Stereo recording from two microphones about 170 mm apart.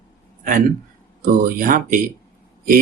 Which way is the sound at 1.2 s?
55° right (ahead or behind).